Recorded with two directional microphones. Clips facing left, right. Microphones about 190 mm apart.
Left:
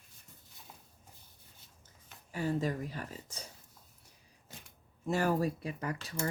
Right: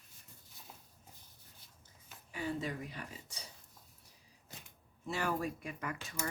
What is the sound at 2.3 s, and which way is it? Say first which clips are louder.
Speech: left 5 dB; 40° left (ahead or behind).